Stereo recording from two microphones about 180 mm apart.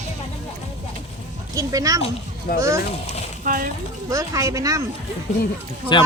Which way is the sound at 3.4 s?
50° right (ahead or behind).